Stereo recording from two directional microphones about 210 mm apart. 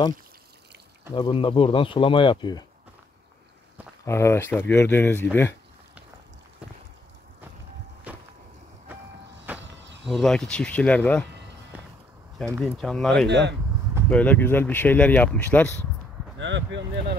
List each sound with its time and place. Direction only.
1.1 s speech: 25° left (ahead or behind)
4.0 s speech: 10° left (ahead or behind)
8.1 s boat: 5° right (ahead or behind)
9.5 s vehicle: 10° right (ahead or behind)
10.0 s speech: centre (ahead or behind)
11.7 s vehicle: 5° right (ahead or behind)
12.6 s speech: centre (ahead or behind)
13.3 s speech: 55° right (ahead or behind)
14.1 s speech: 5° left (ahead or behind)
16.3 s speech: 60° right (ahead or behind)